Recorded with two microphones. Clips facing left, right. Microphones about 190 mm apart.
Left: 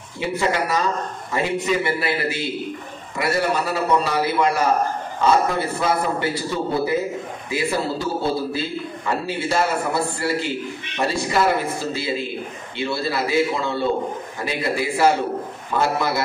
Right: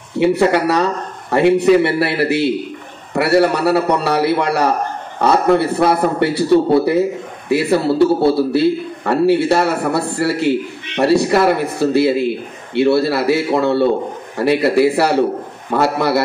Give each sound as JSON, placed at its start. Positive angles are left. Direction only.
{"t": 0.2, "sound": "a man's voice", "side_deg": -65}